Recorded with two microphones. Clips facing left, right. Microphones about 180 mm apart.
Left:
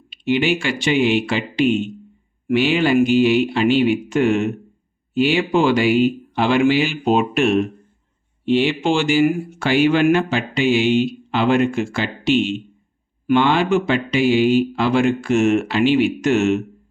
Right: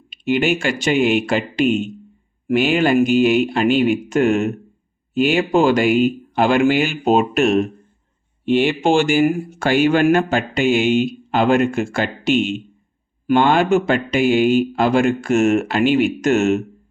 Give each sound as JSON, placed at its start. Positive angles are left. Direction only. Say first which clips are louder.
{"t": 0.1, "sound": "speech", "louder": "even", "side_deg": -45}